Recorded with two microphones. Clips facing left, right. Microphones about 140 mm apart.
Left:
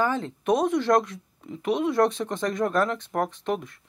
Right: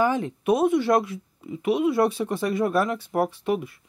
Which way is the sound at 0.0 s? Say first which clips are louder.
Right 3 dB; 15° right (ahead or behind).